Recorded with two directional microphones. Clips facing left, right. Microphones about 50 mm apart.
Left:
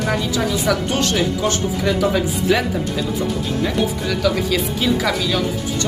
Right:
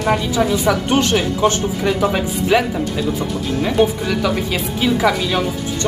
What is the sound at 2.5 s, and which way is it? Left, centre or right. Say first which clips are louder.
Speech: right 3 dB; centre.